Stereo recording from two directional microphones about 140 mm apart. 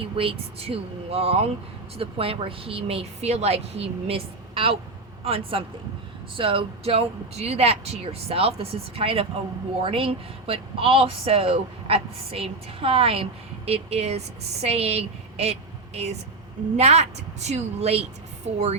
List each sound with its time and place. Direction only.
0.0 s speech: 40° right (ahead or behind)
16.7 s speech: 50° right (ahead or behind)